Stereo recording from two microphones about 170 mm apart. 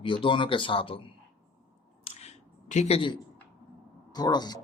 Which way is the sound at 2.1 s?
40° left (ahead or behind).